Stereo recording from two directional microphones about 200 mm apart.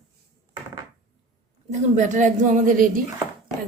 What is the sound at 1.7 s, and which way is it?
A woman's voice, 35° right (ahead or behind).